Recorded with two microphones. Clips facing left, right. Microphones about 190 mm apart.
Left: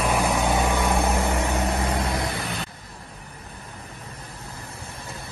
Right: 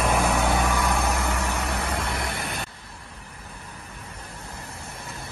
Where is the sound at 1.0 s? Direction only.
35° left (ahead or behind).